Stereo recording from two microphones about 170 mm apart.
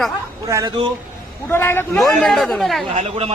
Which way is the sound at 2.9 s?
40° right (ahead or behind).